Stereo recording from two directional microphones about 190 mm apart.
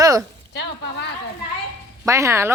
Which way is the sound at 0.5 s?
65° left (ahead or behind).